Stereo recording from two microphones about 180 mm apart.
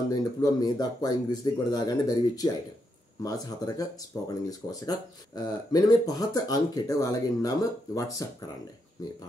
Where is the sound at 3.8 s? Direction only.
20° left (ahead or behind).